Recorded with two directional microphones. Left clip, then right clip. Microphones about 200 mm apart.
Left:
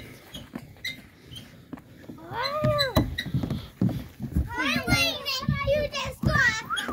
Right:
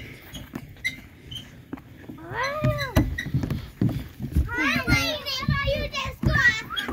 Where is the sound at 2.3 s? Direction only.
60° left (ahead or behind).